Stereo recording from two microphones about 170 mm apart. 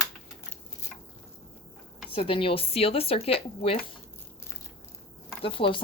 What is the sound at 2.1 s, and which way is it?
Speech, 30° left (ahead or behind).